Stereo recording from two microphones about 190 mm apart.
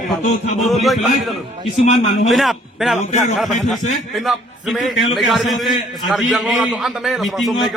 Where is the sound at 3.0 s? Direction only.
40° left (ahead or behind).